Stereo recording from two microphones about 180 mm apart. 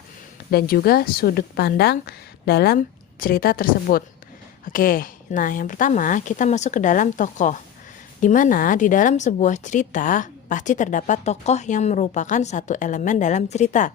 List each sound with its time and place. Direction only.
0.5 s a woman's voice: 55° left (ahead or behind)